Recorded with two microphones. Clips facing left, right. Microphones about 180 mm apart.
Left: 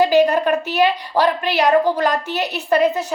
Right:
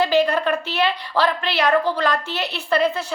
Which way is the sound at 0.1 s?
40° left (ahead or behind).